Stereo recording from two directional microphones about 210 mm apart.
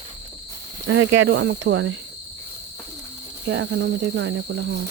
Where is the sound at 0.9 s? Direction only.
65° right (ahead or behind).